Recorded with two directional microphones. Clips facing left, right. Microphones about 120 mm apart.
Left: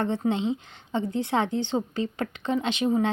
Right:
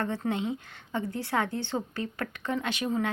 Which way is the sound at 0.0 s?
20° left (ahead or behind).